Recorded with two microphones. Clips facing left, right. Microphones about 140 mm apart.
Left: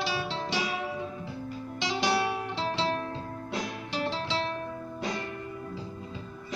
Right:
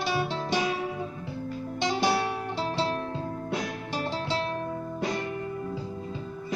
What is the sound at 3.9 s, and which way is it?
Music, 45° right (ahead or behind).